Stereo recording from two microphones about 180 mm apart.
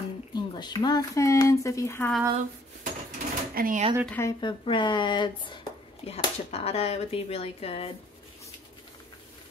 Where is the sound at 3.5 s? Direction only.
50° right (ahead or behind).